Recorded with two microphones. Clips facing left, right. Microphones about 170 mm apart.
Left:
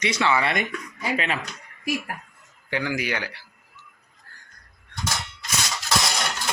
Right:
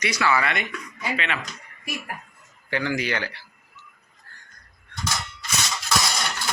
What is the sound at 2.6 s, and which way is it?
Speech, 15° left (ahead or behind).